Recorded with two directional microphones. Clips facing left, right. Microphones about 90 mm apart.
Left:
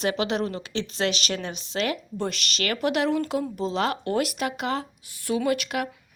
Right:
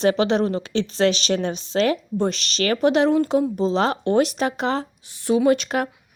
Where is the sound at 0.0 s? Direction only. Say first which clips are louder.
Right 7 dB; 35° right (ahead or behind).